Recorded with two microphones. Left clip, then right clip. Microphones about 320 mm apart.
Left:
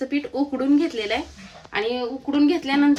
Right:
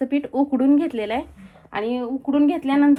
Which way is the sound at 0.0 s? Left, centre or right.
Centre.